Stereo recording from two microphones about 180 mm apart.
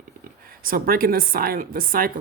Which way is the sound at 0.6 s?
55° right (ahead or behind).